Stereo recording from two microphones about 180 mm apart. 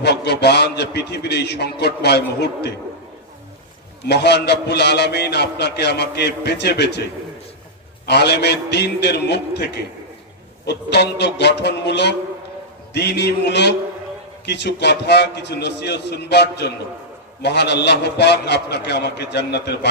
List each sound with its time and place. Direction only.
0.0 s a man's voice: 65° left (ahead or behind)
4.1 s a man's voice: 65° left (ahead or behind)
8.1 s a man's voice: 70° left (ahead or behind)